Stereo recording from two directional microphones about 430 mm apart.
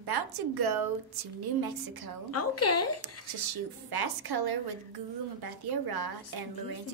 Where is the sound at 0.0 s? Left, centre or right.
Right.